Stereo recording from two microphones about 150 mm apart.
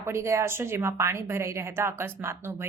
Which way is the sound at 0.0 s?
20° right (ahead or behind).